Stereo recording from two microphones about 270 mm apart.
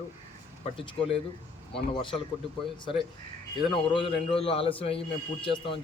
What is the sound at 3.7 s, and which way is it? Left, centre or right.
A man's voice, centre.